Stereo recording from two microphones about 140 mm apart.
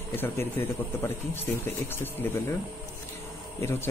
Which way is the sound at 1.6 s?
15° left (ahead or behind).